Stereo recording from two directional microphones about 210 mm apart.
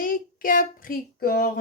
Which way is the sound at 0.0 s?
40° left (ahead or behind).